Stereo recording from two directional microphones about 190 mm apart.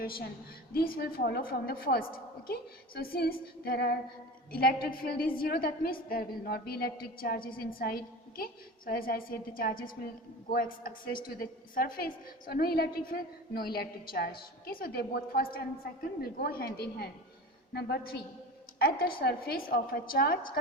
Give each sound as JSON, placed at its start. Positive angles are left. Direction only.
{"t": 0.0, "sound": "a woman's voice", "side_deg": 50}